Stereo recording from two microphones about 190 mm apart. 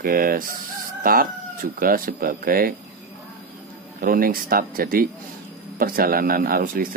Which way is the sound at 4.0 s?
50° right (ahead or behind).